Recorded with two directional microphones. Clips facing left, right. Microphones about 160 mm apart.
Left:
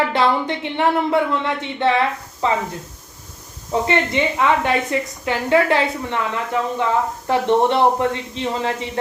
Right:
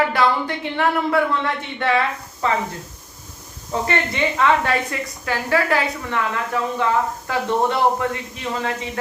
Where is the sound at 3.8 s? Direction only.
20° left (ahead or behind).